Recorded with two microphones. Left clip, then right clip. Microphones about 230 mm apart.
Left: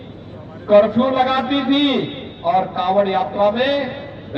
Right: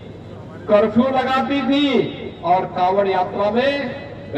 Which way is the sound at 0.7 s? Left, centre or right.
Centre.